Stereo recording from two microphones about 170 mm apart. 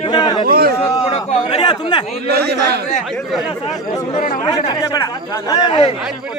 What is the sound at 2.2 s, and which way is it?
Speech, 75° right (ahead or behind).